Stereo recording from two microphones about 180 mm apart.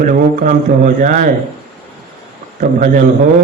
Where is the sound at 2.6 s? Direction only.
45° right (ahead or behind).